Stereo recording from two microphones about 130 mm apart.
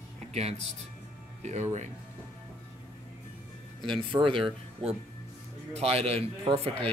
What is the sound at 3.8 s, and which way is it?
Speech, 40° right (ahead or behind).